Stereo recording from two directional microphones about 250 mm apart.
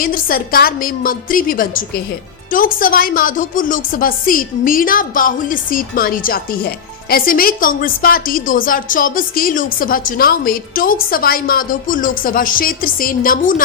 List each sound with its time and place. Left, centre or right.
0.0 s a woman's voice: left